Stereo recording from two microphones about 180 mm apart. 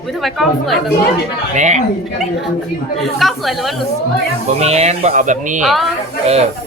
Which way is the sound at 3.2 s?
Centre (ahead or behind).